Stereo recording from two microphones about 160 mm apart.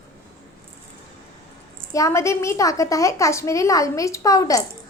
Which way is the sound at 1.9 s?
20° left (ahead or behind).